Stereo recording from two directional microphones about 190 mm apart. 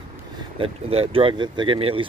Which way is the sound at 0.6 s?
30° right (ahead or behind).